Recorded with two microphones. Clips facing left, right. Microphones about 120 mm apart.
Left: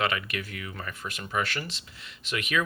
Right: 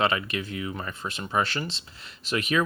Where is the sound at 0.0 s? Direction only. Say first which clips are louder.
Right 4 dB; 30° right (ahead or behind).